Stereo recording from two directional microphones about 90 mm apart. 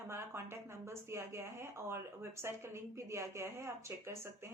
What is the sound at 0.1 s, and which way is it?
A woman's voice, 30° right (ahead or behind).